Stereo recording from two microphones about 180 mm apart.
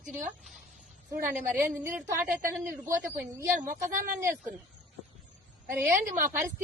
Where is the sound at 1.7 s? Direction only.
10° right (ahead or behind).